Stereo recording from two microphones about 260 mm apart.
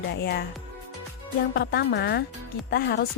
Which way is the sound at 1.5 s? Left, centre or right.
Left.